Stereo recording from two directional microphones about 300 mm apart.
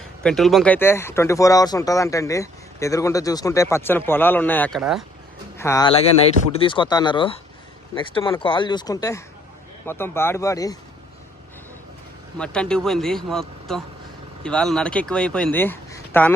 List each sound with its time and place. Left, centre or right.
0.2 s speech: centre
5.5 s speech: centre
12.4 s speech: centre